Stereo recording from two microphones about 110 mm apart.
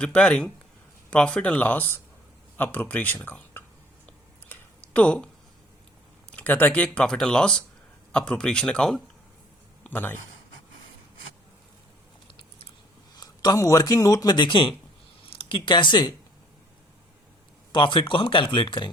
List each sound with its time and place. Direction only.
0.0 s speech: 10° left (ahead or behind)
4.0 s a sound: 15° left (ahead or behind)
6.3 s speech: 15° left (ahead or behind)
9.8 s speech: 15° left (ahead or behind)
13.1 s speech: 35° left (ahead or behind)
17.7 s speech: 50° left (ahead or behind)